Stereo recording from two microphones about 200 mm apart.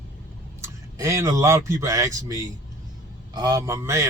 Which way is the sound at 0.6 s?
15° right (ahead or behind).